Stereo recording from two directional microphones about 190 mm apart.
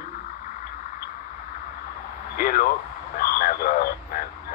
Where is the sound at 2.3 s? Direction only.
50° left (ahead or behind).